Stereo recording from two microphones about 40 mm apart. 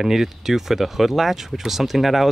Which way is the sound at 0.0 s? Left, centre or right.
Centre.